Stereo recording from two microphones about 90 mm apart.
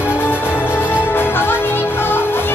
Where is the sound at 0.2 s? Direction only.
25° left (ahead or behind).